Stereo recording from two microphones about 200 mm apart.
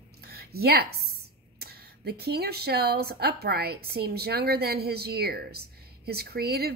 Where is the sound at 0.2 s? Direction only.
50° right (ahead or behind).